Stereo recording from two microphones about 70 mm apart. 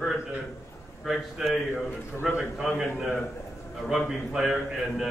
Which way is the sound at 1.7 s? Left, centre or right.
Centre.